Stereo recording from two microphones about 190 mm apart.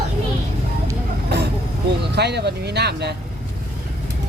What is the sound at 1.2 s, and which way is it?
Vehicle, 60° right (ahead or behind).